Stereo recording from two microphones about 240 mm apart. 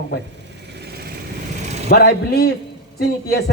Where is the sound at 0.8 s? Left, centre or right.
Right.